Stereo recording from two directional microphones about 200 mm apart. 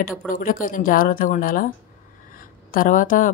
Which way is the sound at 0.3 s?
45° left (ahead or behind).